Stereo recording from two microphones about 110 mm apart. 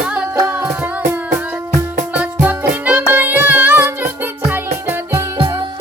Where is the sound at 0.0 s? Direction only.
10° right (ahead or behind).